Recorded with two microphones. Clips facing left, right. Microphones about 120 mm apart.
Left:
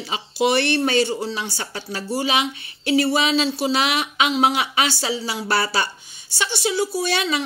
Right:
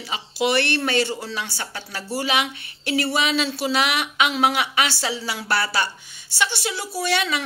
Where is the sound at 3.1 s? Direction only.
30° left (ahead or behind).